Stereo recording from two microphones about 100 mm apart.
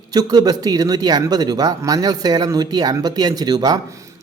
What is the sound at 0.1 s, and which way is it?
Speech, 40° right (ahead or behind).